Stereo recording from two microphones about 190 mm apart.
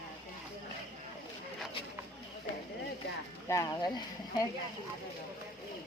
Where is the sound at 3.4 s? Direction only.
20° left (ahead or behind).